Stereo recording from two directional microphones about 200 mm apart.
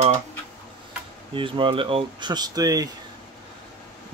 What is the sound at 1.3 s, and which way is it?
Speech, 25° right (ahead or behind).